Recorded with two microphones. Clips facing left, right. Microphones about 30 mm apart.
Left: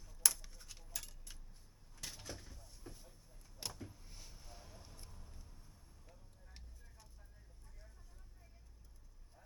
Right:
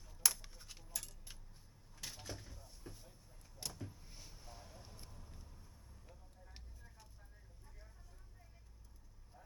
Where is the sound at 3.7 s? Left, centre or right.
Centre.